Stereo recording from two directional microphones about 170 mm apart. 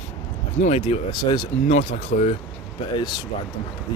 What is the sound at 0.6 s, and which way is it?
Speech, 40° left (ahead or behind).